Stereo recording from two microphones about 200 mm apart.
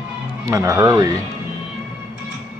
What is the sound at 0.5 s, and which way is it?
Speech, 15° right (ahead or behind).